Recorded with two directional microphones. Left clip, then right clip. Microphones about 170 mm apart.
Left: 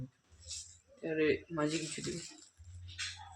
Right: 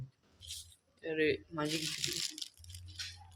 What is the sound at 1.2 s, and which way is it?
Speech, 30° left (ahead or behind).